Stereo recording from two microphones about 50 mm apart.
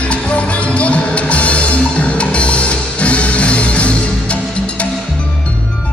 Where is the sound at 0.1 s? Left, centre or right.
Left.